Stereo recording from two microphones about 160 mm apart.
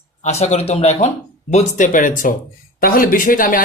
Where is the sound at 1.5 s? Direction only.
55° left (ahead or behind).